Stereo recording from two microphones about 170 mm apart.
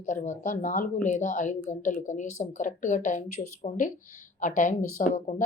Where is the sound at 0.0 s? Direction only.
45° left (ahead or behind).